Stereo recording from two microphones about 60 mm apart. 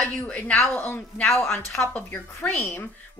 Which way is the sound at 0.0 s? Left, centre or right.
Left.